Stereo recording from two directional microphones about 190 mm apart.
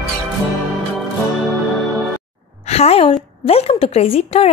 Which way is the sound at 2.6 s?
35° left (ahead or behind).